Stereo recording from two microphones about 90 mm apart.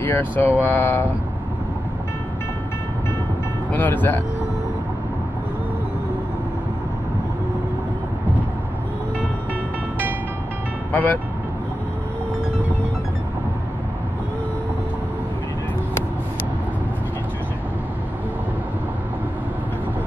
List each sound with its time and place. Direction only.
0.0 s speech: 20° left (ahead or behind)
3.7 s speech: 20° left (ahead or behind)
10.9 s speech: 20° left (ahead or behind)